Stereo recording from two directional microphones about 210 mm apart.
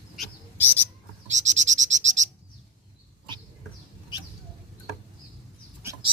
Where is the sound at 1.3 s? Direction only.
35° right (ahead or behind).